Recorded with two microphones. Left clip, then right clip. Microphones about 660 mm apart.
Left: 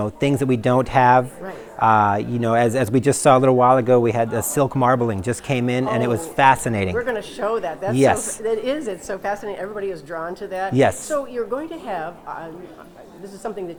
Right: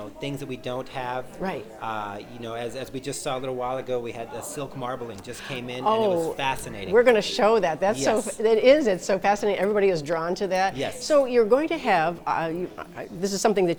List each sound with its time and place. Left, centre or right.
0.0 s speech: left
6.9 s speech: right
7.9 s speech: left
8.4 s a woman's voice: right